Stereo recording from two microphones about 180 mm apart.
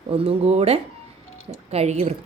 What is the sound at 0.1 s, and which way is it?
A woman's voice, 35° right (ahead or behind).